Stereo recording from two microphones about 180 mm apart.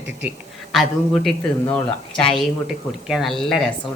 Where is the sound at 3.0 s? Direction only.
Centre (ahead or behind).